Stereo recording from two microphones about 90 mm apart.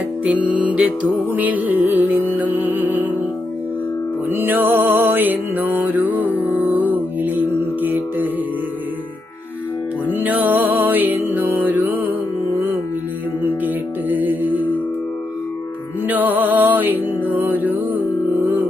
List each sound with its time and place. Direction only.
0.3 s music: 15° right (ahead or behind)
4.3 s music: 25° right (ahead or behind)
10.1 s music: 20° right (ahead or behind)
14.1 s music: 20° right (ahead or behind)
16.0 s music: 20° right (ahead or behind)